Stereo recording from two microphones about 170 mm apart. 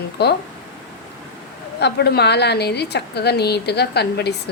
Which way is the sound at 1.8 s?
75° left (ahead or behind).